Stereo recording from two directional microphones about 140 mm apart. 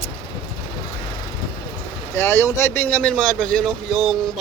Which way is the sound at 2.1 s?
20° left (ahead or behind).